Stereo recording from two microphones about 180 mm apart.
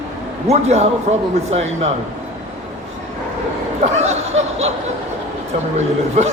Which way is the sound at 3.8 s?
40° right (ahead or behind).